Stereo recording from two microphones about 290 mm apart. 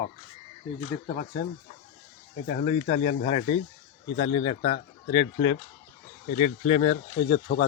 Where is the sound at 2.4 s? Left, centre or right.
Left.